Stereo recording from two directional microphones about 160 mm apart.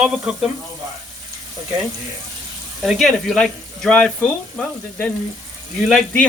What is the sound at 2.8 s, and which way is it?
Speech, centre (ahead or behind).